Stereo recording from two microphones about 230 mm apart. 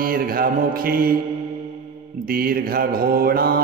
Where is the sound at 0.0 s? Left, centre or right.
Right.